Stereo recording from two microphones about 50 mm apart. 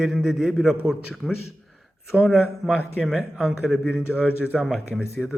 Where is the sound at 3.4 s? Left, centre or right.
Centre.